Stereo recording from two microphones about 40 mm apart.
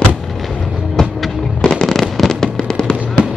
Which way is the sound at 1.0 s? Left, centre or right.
Centre.